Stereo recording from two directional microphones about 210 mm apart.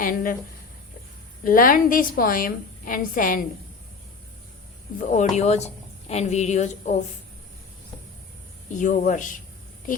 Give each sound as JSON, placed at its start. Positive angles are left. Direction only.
{"t": 0.0, "sound": "speech", "side_deg": 40}
{"t": 1.5, "sound": "speech", "side_deg": 40}
{"t": 4.9, "sound": "speech", "side_deg": 35}
{"t": 8.7, "sound": "speech", "side_deg": 35}